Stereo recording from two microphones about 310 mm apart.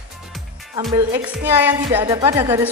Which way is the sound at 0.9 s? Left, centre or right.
Centre.